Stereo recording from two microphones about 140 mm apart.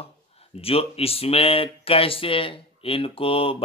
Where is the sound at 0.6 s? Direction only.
45° left (ahead or behind).